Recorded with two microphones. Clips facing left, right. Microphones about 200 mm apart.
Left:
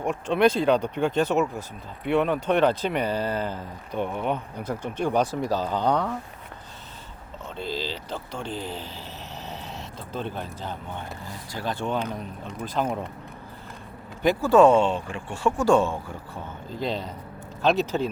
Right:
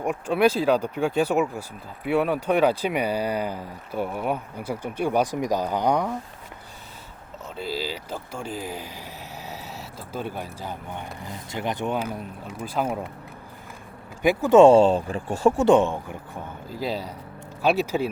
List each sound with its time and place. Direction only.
0.0 s speech: 10° right (ahead or behind)
7.5 s speech: 5° right (ahead or behind)
11.9 s speech: 5° right (ahead or behind)
14.2 s speech: 15° right (ahead or behind); by 15.5 s 40° right (ahead or behind)
15.5 s speech: 20° right (ahead or behind)